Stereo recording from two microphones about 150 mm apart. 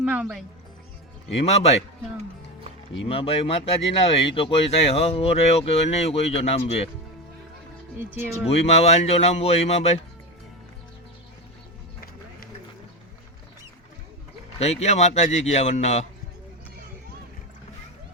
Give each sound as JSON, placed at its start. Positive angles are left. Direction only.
{"t": 0.0, "sound": "speech", "side_deg": -10}
{"t": 1.5, "sound": "speech", "side_deg": 45}
{"t": 3.1, "sound": "speech", "side_deg": 40}
{"t": 7.9, "sound": "speech", "side_deg": -15}
{"t": 8.4, "sound": "speech", "side_deg": 45}
{"t": 14.6, "sound": "speech", "side_deg": 45}